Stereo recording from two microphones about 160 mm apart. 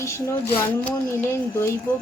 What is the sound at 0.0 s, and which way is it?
Speech, 15° left (ahead or behind).